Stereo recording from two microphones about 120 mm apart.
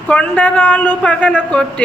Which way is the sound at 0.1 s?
10° left (ahead or behind).